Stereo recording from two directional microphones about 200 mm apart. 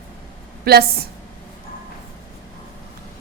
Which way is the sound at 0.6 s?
50° right (ahead or behind).